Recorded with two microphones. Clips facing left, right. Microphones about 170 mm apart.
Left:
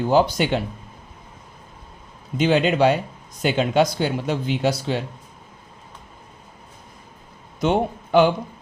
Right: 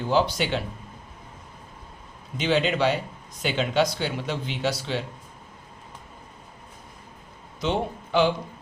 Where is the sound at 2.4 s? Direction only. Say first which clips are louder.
Left 5 dB; 50° left (ahead or behind).